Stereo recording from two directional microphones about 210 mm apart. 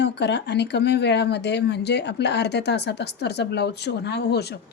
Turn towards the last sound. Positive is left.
turn(degrees=50)  # may be behind; listen again after turning